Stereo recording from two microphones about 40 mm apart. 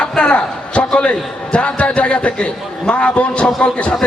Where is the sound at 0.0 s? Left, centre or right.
Left.